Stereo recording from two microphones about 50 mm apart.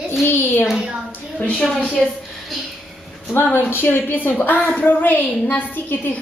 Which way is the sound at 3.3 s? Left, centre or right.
Left.